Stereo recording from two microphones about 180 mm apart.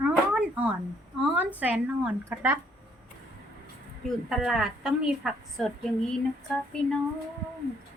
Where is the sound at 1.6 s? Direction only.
10° right (ahead or behind).